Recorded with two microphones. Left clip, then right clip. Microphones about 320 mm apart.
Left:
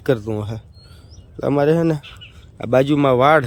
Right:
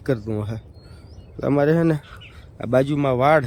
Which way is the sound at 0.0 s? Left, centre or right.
Centre.